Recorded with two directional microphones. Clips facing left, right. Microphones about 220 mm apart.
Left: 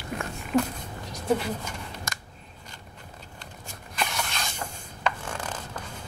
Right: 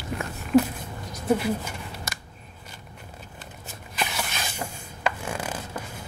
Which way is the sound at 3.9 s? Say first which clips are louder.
Right 1 dB; 5° right (ahead or behind).